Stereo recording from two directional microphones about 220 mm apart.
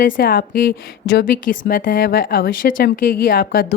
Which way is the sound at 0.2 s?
40° left (ahead or behind).